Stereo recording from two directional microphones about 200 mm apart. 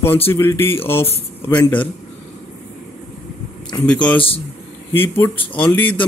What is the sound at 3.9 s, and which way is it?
A man's voice, 5° left (ahead or behind).